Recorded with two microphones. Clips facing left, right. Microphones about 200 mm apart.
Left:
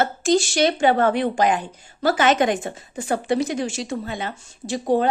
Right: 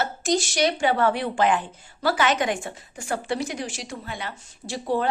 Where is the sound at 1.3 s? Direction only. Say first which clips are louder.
Left 2 dB; 15° left (ahead or behind).